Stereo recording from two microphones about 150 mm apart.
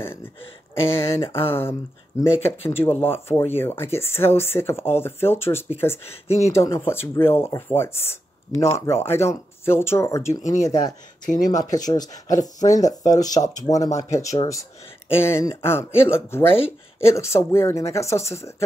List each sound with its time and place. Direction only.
0.0 s a sound: 15° left (ahead or behind)
0.8 s speech: 15° left (ahead or behind)
10.4 s speech: 55° left (ahead or behind)
10.7 s speech: 25° left (ahead or behind)